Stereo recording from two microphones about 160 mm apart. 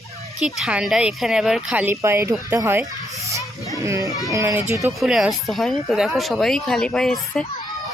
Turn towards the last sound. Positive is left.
turn(degrees=5)  # may be behind; listen again after turning